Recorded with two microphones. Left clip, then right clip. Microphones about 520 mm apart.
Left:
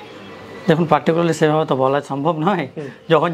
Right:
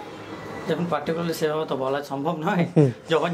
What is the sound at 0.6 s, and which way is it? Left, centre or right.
Speech, left.